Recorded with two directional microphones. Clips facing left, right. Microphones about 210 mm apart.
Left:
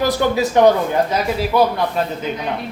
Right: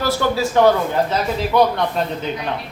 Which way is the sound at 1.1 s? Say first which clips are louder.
Even; 5° left (ahead or behind).